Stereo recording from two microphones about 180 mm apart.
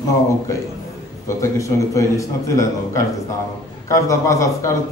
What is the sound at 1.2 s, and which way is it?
A man's voice, 15° left (ahead or behind).